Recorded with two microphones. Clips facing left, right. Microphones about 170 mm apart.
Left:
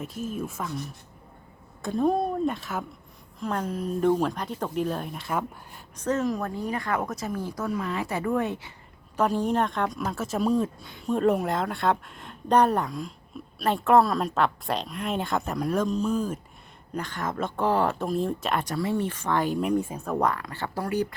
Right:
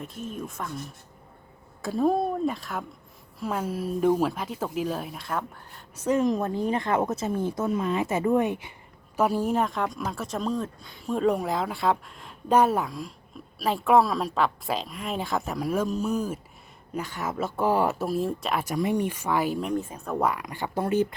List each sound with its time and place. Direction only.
0.0 s speech: 5° left (ahead or behind)
1.8 s speech: centre (ahead or behind)
6.0 s speech: 10° right (ahead or behind)
19.6 s speech: 10° left (ahead or behind)
20.1 s speech: 10° right (ahead or behind)